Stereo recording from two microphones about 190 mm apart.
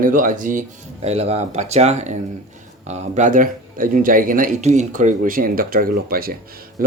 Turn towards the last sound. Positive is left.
turn(degrees=-45)  # may be behind; listen again after turning